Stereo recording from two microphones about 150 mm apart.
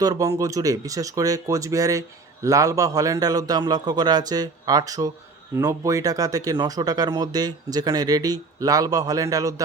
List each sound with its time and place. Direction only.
0.0 s speech: 25° right (ahead or behind)